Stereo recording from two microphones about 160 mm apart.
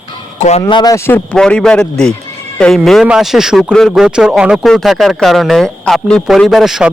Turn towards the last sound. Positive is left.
turn(degrees=-5)  # may be behind; listen again after turning